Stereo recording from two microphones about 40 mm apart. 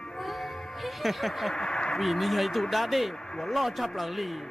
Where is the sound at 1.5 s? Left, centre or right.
Centre.